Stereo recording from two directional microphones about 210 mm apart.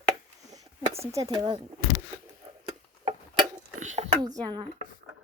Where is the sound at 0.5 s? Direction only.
15° right (ahead or behind).